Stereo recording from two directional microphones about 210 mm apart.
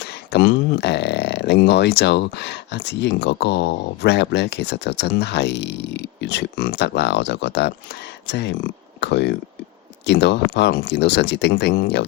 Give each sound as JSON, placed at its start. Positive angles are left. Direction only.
{"t": 0.0, "sound": "speech", "side_deg": 50}